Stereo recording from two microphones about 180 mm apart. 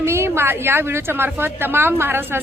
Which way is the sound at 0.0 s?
15° right (ahead or behind).